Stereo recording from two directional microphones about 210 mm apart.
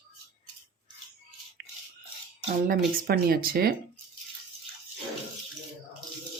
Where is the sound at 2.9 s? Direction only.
45° right (ahead or behind).